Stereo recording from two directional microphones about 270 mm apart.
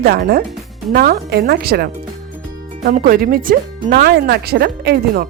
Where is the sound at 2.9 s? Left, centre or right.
Right.